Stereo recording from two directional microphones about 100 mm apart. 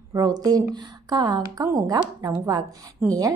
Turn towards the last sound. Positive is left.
turn(degrees=-35)  # may be behind; listen again after turning